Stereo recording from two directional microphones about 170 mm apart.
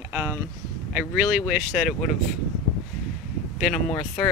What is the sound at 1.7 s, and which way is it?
Speech, centre (ahead or behind).